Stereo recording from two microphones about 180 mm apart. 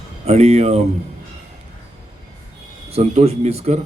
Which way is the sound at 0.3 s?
35° right (ahead or behind).